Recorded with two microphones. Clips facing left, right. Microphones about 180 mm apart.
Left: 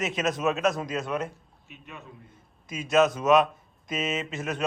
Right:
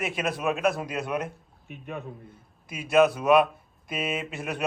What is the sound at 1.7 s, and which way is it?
Speech, 55° right (ahead or behind).